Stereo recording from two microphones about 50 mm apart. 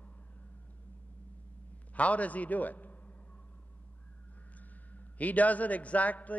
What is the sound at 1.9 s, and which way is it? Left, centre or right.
A man's voice, left.